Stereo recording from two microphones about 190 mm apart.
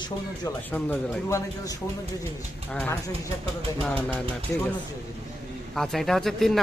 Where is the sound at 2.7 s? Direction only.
5° left (ahead or behind).